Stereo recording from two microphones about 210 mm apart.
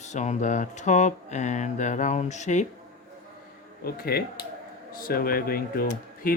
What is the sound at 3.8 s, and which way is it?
Speech, 45° left (ahead or behind).